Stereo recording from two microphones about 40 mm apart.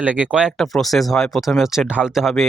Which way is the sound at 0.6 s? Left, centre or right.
Centre.